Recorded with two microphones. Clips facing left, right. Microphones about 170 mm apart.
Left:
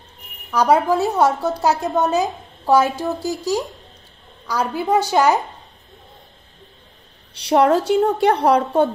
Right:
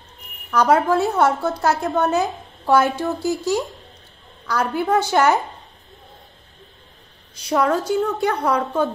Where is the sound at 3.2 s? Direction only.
35° left (ahead or behind).